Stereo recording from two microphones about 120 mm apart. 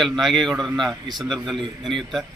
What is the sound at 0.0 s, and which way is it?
A man's voice, centre (ahead or behind).